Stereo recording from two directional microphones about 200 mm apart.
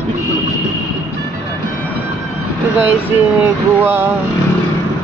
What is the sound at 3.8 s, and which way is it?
Speech, 10° right (ahead or behind).